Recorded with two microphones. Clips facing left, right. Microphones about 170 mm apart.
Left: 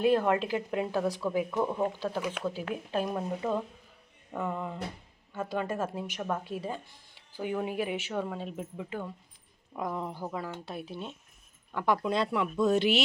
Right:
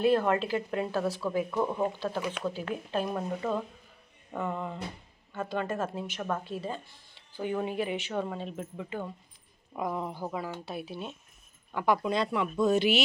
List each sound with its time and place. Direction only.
0.0 s speech: 15° left (ahead or behind)
1.6 s speech: 5° left (ahead or behind)
9.7 s speech: 10° right (ahead or behind)